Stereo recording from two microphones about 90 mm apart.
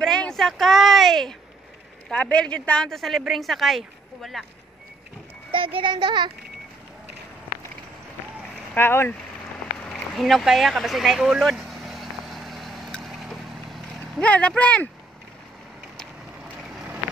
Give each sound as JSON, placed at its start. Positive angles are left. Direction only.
{"t": 0.0, "sound": "speech", "side_deg": 5}
{"t": 5.5, "sound": "speech", "side_deg": -75}
{"t": 8.7, "sound": "speech", "side_deg": 25}
{"t": 9.8, "sound": "a sound", "side_deg": 5}
{"t": 14.2, "sound": "speech", "side_deg": 15}
{"t": 16.4, "sound": "boat", "side_deg": -15}